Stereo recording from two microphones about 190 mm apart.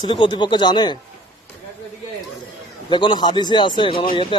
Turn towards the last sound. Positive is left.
turn(degrees=30)  # may be behind; listen again after turning